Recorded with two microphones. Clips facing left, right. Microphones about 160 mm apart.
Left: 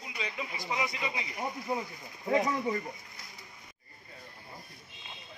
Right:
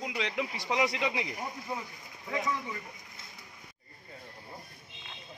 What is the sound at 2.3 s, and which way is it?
Speech, 40° left (ahead or behind).